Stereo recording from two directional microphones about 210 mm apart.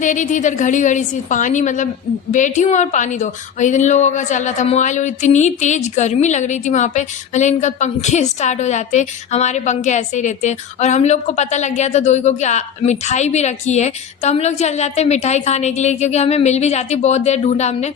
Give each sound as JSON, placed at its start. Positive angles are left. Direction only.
{"t": 0.0, "sound": "a woman's voice", "side_deg": 35}